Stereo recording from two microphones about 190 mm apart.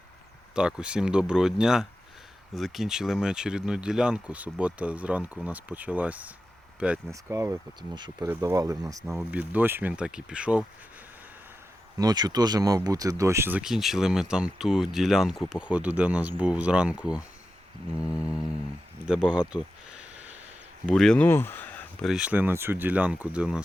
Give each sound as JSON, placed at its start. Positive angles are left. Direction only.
{"t": 0.5, "sound": "speech", "side_deg": -5}
{"t": 11.9, "sound": "speech", "side_deg": -20}